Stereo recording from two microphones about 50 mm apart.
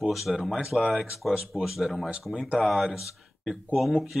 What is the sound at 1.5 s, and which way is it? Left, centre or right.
Speech, centre.